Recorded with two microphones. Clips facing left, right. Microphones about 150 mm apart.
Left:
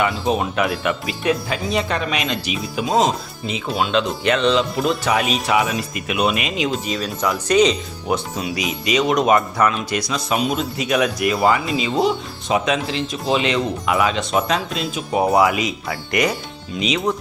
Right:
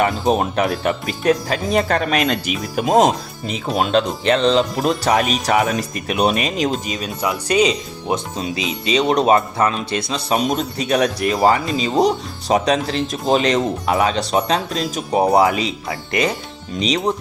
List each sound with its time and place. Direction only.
0.0 s speech: 45° right (ahead or behind)
4.2 s speech: 35° right (ahead or behind)
7.4 s speech: 10° right (ahead or behind)
8.0 s speech: 25° right (ahead or behind)
16.8 s speech: 35° right (ahead or behind)